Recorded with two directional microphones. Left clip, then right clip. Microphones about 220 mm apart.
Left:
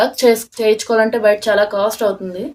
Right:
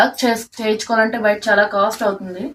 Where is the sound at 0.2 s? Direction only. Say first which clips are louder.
Left 6 dB; 55° left (ahead or behind).